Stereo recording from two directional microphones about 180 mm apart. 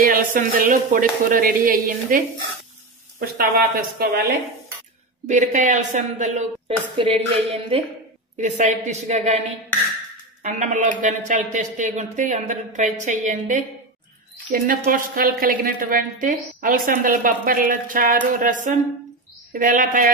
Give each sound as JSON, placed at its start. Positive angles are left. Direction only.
{"t": 0.0, "sound": "a woman's voice", "side_deg": -50}
{"t": 5.2, "sound": "a woman's voice", "side_deg": -45}
{"t": 7.0, "sound": "a woman's voice", "side_deg": -30}
{"t": 10.4, "sound": "a woman's voice", "side_deg": -40}